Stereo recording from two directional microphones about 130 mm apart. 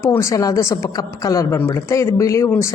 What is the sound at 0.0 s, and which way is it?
Speech, 20° left (ahead or behind).